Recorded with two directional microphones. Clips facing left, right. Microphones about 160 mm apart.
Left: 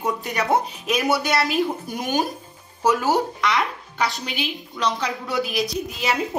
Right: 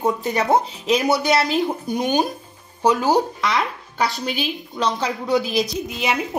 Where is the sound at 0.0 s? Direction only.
25° right (ahead or behind).